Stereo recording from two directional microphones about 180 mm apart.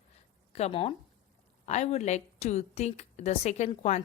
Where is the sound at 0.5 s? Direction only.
35° left (ahead or behind).